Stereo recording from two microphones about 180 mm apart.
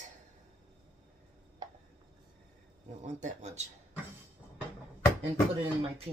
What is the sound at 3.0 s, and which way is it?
Speech, 40° right (ahead or behind).